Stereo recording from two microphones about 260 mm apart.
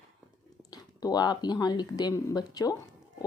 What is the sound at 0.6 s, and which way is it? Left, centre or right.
Speech, centre.